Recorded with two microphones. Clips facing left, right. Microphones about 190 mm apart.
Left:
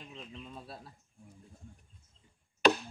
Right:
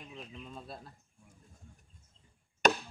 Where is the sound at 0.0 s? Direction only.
5° right (ahead or behind).